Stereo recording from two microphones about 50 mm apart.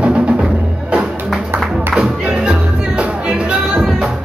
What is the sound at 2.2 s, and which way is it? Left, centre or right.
Music, right.